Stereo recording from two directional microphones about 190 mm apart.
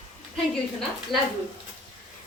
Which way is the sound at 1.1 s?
Centre (ahead or behind).